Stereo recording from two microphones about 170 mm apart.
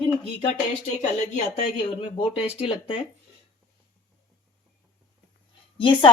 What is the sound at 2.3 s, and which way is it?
Speech, 35° left (ahead or behind).